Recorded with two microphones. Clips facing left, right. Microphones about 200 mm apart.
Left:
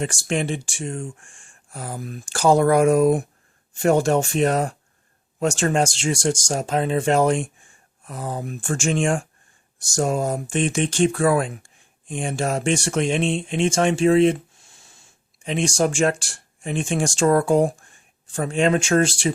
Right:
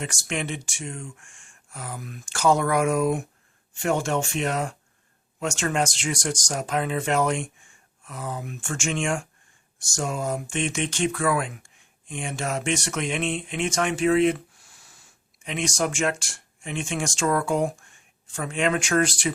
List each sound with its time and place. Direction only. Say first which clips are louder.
0.0 s speech: left 6 dB; 30° left (ahead or behind)